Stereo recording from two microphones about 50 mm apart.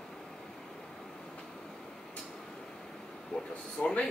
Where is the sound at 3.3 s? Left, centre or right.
Left.